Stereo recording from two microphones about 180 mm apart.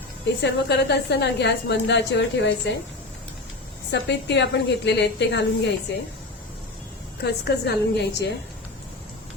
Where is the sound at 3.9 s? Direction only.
75° left (ahead or behind).